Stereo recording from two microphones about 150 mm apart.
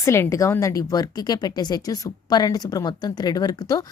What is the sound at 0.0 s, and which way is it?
A woman's voice, 20° left (ahead or behind).